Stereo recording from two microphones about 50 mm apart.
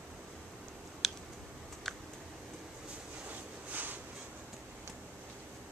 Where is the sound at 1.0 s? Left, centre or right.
Centre.